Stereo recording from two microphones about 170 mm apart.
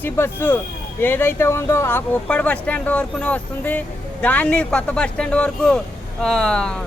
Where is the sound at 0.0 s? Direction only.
15° left (ahead or behind).